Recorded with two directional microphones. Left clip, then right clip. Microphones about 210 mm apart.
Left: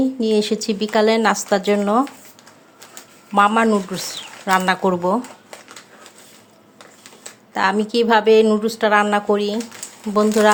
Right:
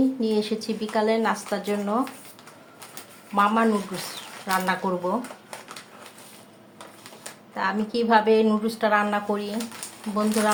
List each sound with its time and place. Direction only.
0.0 s speech: 35° left (ahead or behind)
3.3 s speech: 40° left (ahead or behind)
7.5 s speech: 40° left (ahead or behind)